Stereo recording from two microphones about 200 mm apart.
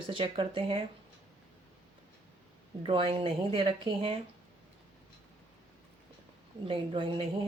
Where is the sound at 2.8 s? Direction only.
25° right (ahead or behind).